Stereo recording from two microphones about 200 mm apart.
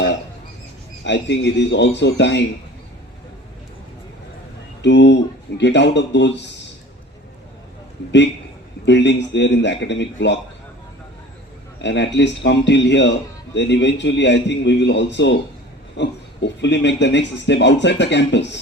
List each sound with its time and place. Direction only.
1.0 s a man's voice: 60° left (ahead or behind)
4.8 s a man's voice: 60° left (ahead or behind)
8.9 s a man's voice: 60° left (ahead or behind)
11.8 s a man's voice: 65° left (ahead or behind)